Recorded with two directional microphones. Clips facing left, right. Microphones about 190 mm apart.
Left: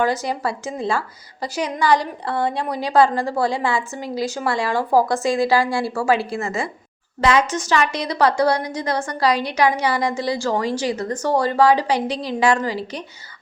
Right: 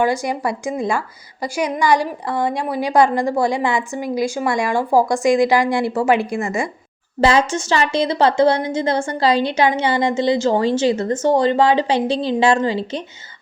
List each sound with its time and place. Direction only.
0.0 s a woman's voice: 10° right (ahead or behind)
7.2 s a woman's voice: 30° right (ahead or behind)